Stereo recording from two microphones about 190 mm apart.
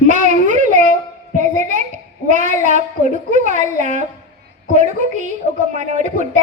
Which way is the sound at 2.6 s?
40° right (ahead or behind).